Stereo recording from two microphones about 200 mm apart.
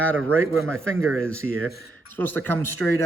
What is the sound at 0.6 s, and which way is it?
Speech, 90° right.